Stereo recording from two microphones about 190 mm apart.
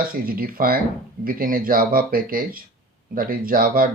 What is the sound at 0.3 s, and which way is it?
Speech, 50° right (ahead or behind).